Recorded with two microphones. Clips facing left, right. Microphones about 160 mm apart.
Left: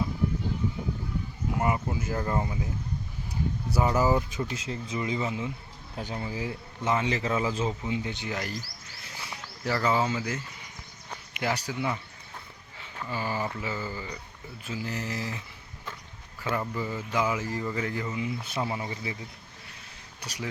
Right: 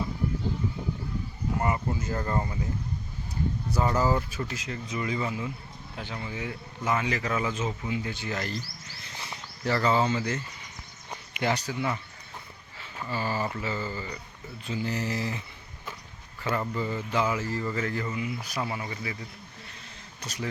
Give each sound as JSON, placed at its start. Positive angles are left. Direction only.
{"t": 1.5, "sound": "speech", "side_deg": 10}
{"t": 3.7, "sound": "speech", "side_deg": 10}
{"t": 4.5, "sound": "a man's voice", "side_deg": 30}
{"t": 6.0, "sound": "a man's voice", "side_deg": 35}
{"t": 9.0, "sound": "a sound", "side_deg": 5}
{"t": 11.3, "sound": "speech", "side_deg": 5}
{"t": 13.1, "sound": "speech", "side_deg": 15}
{"t": 16.6, "sound": "speech", "side_deg": 5}
{"t": 20.2, "sound": "speech", "side_deg": 10}